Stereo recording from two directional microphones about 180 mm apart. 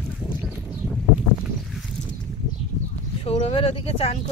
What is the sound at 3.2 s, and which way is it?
Speech, 35° left (ahead or behind).